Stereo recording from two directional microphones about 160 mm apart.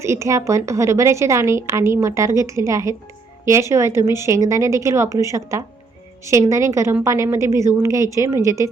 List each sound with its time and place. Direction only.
0.0 s a woman's voice: 20° right (ahead or behind)